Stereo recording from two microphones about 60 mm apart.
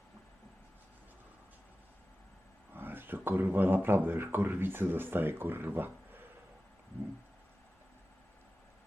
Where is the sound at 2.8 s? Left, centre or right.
Right.